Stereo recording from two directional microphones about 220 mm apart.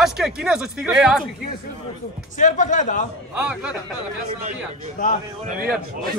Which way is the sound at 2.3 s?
35° left (ahead or behind).